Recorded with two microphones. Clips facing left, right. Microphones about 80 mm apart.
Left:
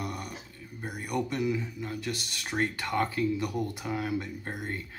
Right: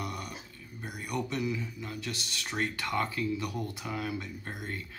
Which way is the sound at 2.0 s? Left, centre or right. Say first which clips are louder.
Left 3 dB; left.